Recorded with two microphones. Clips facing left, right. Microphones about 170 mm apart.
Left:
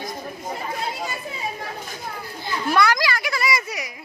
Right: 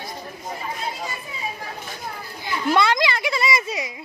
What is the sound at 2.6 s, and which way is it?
A child's voice, 20° right (ahead or behind).